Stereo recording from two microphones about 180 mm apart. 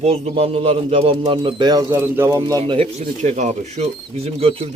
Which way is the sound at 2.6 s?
35° right (ahead or behind).